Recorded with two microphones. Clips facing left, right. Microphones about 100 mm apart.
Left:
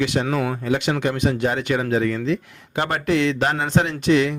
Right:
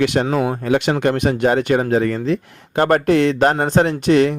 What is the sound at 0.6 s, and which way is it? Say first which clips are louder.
Speech: right 4 dB; 55° right (ahead or behind).